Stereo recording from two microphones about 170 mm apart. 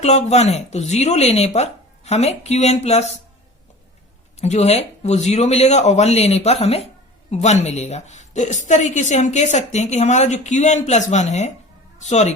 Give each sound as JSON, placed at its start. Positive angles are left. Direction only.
{"t": 0.0, "sound": "speech", "side_deg": 40}
{"t": 4.4, "sound": "a woman's voice", "side_deg": 40}